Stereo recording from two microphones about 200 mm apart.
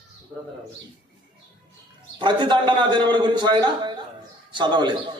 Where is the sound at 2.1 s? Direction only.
25° right (ahead or behind).